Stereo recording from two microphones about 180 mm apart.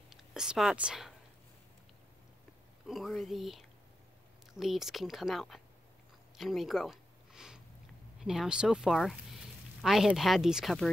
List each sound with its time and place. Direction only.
0.1 s speech: centre (ahead or behind)
2.9 s speech: centre (ahead or behind)
6.3 s a sound: centre (ahead or behind)
8.2 s speech: 5° right (ahead or behind)